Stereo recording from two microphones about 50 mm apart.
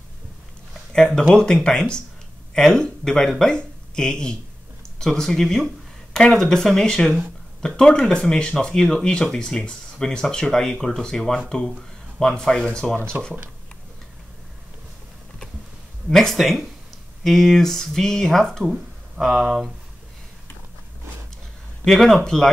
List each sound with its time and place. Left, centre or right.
0.9 s speech: centre
13.1 s speech: right
16.1 s speech: centre
18.7 s speech: centre
21.8 s speech: centre